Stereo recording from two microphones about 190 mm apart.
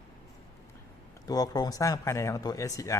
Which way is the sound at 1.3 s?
20° left (ahead or behind).